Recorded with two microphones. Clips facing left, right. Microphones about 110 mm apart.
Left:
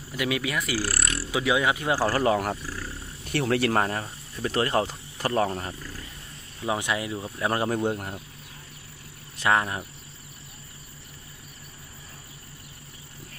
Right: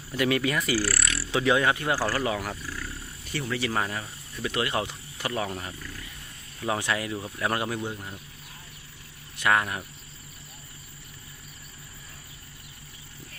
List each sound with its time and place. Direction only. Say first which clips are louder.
0.1 s speech: right 3 dB; 5° left (ahead or behind)
0.9 s a sound: even; 40° left (ahead or behind)
1.3 s speech: right 1 dB; 10° left (ahead or behind)
2.1 s speech: left 5 dB; 35° left (ahead or behind)
2.6 s wild animals: left 1 dB; 15° left (ahead or behind)
3.3 s speech: left 6 dB; 65° left (ahead or behind); by 6.1 s 35° left (ahead or behind)
6.6 s speech: left 1 dB; 20° left (ahead or behind)
7.8 s speech: left 7 dB; 50° left (ahead or behind)
9.4 s speech: left 1 dB; 25° left (ahead or behind)